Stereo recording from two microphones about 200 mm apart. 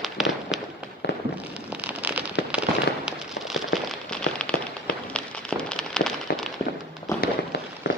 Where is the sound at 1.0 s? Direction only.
60° left (ahead or behind).